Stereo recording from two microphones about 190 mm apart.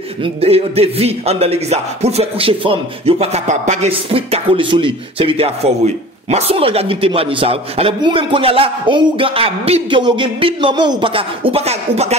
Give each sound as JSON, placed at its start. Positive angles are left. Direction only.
{"t": 0.2, "sound": "speech", "side_deg": -30}